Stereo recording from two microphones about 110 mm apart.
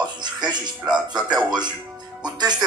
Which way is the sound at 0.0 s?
40° right (ahead or behind).